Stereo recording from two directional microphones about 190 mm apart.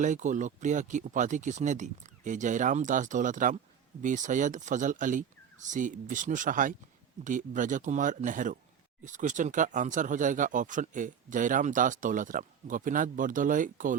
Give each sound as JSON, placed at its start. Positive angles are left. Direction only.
{"t": 0.0, "sound": "speech", "side_deg": -40}